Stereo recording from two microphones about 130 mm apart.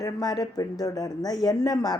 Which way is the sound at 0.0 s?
30° left (ahead or behind).